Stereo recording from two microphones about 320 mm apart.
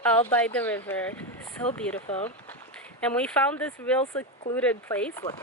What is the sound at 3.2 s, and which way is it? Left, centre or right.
Speech, centre.